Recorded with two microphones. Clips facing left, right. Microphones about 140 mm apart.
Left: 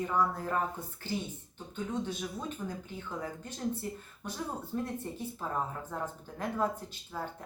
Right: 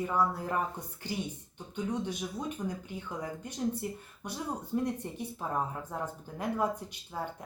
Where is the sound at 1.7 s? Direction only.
15° right (ahead or behind).